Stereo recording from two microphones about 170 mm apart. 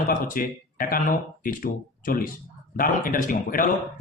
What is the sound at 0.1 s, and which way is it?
Speech, 55° left (ahead or behind).